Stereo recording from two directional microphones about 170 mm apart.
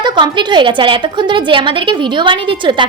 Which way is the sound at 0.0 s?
25° right (ahead or behind).